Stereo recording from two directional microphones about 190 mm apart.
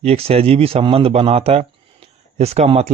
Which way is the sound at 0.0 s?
30° right (ahead or behind).